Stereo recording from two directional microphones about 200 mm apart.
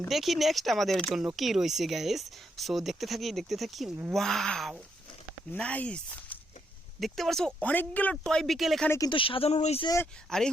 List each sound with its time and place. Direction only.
0.1 s speech: centre (ahead or behind)
8.9 s speech: 20° left (ahead or behind)
9.8 s speech: 15° left (ahead or behind)
10.2 s speech: 5° left (ahead or behind)